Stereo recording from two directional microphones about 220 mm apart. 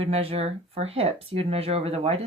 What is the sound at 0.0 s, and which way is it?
Speech, 25° right (ahead or behind).